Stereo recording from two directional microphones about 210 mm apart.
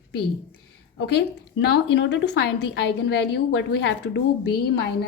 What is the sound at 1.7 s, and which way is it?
A woman's voice, 55° left (ahead or behind).